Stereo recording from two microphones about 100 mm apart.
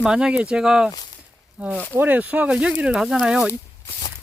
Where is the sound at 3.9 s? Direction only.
50° left (ahead or behind).